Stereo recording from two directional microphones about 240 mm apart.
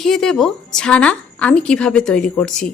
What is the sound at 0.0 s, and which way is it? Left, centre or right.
A woman's voice, centre.